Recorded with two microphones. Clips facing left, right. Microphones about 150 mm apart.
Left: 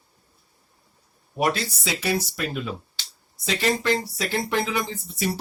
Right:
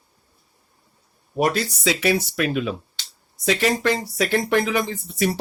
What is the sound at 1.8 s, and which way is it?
Speech, 75° right (ahead or behind).